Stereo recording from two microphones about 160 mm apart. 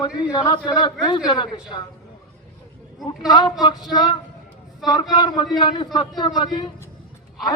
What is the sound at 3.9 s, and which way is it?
A man's voice, 25° left (ahead or behind).